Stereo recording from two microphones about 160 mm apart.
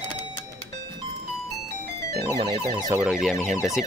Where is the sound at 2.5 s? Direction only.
20° left (ahead or behind).